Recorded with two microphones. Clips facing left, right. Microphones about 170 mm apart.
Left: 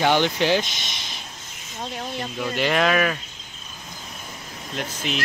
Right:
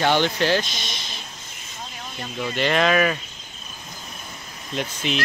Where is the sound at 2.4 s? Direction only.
5° left (ahead or behind).